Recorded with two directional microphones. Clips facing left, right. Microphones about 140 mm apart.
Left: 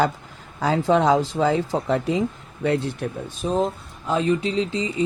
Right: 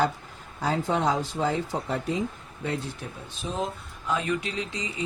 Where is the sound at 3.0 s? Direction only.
60° left (ahead or behind).